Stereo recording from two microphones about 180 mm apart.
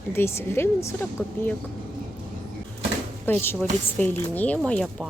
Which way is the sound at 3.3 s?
15° left (ahead or behind).